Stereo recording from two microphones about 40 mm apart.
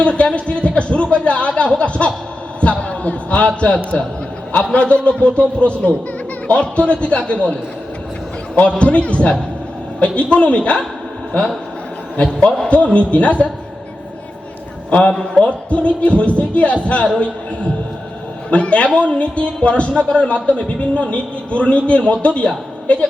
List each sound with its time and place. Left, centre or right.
0.0 s a man's voice: left
8.8 s a man's voice: left
12.1 s a man's voice: left
14.8 s a man's voice: left